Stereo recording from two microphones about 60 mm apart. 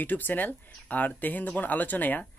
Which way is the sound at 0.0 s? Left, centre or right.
Left.